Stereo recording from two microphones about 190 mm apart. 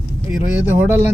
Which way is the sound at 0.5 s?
10° right (ahead or behind).